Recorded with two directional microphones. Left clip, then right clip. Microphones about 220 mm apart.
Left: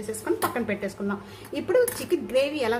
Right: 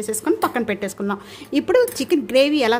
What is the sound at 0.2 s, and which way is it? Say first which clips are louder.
A woman's voice: right 6 dB; 55° right (ahead or behind).